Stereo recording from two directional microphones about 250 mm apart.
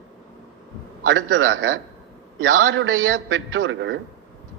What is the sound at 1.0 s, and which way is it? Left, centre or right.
A man's voice, right.